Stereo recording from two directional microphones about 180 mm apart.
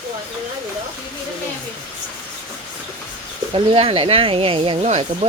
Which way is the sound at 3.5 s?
30° right (ahead or behind).